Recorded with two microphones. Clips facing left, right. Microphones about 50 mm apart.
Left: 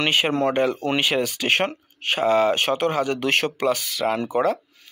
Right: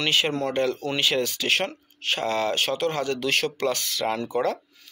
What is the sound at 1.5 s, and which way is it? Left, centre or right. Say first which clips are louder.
Speech: left 3 dB; left.